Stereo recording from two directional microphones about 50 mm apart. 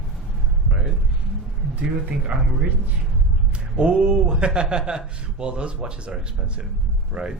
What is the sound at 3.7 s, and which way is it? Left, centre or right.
A man's voice, centre.